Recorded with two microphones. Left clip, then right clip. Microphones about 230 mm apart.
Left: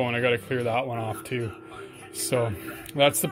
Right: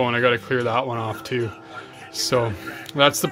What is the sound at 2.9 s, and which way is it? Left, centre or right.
Speech, right.